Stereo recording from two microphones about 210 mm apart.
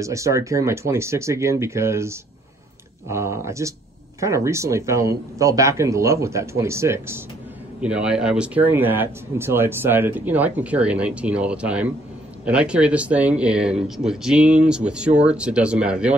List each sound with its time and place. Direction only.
0.0 s speech: 15° right (ahead or behind)